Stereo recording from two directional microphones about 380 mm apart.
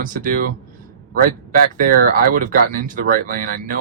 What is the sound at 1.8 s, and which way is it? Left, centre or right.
Speech, right.